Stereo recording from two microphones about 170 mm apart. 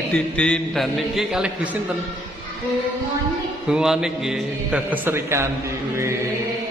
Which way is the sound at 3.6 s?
5° right (ahead or behind).